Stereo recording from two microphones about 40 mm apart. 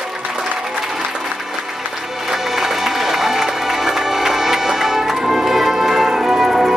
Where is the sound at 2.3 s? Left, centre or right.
Centre.